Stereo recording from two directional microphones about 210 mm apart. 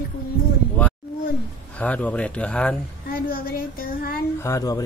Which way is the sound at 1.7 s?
5° left (ahead or behind).